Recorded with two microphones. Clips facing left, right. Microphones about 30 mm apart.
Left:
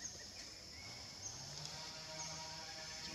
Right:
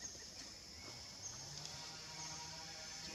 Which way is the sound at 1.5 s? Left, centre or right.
Centre.